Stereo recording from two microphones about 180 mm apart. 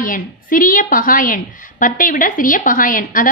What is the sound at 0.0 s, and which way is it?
A woman's voice, 50° left (ahead or behind).